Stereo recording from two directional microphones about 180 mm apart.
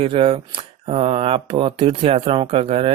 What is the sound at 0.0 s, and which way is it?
Speech, 35° right (ahead or behind).